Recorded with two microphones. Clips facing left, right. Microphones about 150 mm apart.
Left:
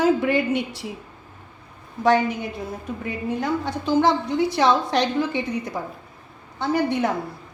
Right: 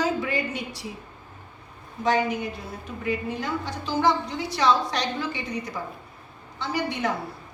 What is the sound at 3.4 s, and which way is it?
A woman's voice, 50° left (ahead or behind).